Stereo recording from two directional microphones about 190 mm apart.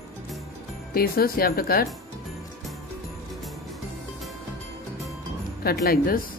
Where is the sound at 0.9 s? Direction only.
50° left (ahead or behind).